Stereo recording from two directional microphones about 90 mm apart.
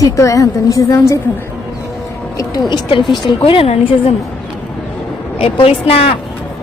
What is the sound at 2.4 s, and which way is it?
Speech, 50° left (ahead or behind).